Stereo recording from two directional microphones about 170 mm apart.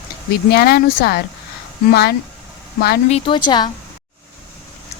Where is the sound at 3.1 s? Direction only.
30° left (ahead or behind).